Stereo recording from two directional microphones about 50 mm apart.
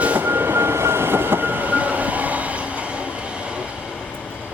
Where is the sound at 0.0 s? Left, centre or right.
Right.